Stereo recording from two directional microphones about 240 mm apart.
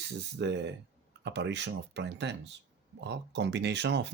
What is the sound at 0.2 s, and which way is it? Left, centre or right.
Speech, right.